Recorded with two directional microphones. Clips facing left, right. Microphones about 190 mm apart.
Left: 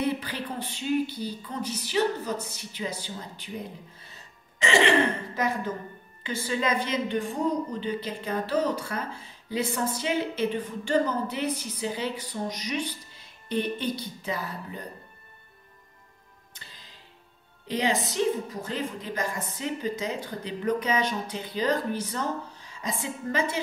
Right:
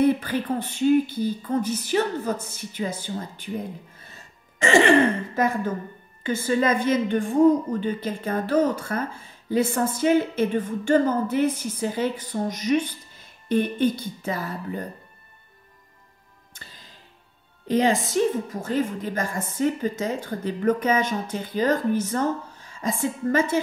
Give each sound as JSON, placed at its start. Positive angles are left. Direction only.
{"t": 0.0, "sound": "a woman's voice", "side_deg": -50}
{"t": 16.5, "sound": "music", "side_deg": -50}
{"t": 17.6, "sound": "a woman's voice", "side_deg": -50}